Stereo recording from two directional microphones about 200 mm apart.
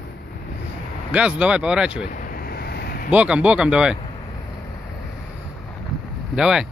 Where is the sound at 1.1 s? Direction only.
5° right (ahead or behind).